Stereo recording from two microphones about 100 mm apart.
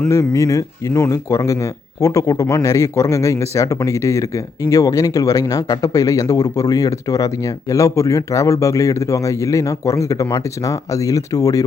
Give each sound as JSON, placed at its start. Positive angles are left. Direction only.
{"t": 0.1, "sound": "speech", "side_deg": 30}